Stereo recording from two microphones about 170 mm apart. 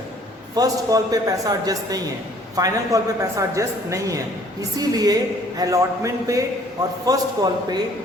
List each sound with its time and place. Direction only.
0.5 s speech: 20° right (ahead or behind)